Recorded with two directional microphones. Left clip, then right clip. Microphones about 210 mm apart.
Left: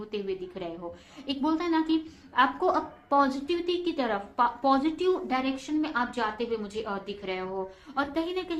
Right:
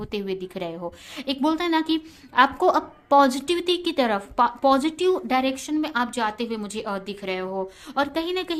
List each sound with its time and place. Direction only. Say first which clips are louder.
0.1 s a woman's voice: right 3 dB; 35° right (ahead or behind)